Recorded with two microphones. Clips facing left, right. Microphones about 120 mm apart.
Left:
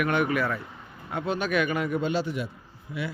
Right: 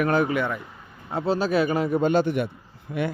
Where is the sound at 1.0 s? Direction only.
30° right (ahead or behind).